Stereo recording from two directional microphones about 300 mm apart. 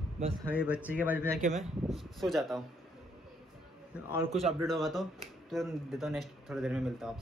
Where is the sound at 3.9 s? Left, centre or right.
Centre.